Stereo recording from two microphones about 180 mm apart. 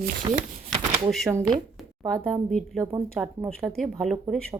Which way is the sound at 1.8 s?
Centre (ahead or behind).